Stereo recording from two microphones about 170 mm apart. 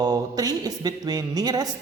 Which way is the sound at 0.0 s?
20° right (ahead or behind).